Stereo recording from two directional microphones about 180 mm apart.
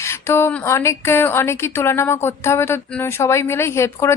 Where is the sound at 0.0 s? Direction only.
15° left (ahead or behind).